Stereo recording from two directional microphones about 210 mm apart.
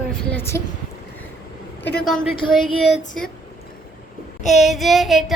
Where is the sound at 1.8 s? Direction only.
50° left (ahead or behind).